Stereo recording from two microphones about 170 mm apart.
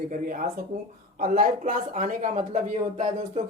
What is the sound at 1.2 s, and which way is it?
Speech, 55° right (ahead or behind).